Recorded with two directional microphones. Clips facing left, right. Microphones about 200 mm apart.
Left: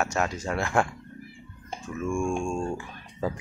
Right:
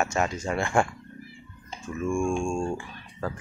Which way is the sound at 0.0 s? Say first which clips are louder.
Right 1 dB; centre (ahead or behind).